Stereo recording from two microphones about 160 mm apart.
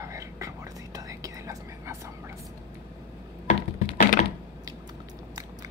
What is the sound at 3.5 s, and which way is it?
Computer keyboard, 50° left (ahead or behind).